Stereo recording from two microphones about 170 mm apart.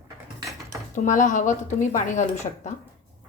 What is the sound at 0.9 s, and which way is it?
A woman's voice, 50° left (ahead or behind).